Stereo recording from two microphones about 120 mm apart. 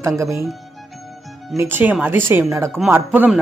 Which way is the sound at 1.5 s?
15° right (ahead or behind).